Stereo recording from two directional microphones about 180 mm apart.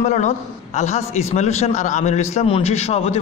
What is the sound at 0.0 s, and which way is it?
A man's voice, 40° left (ahead or behind).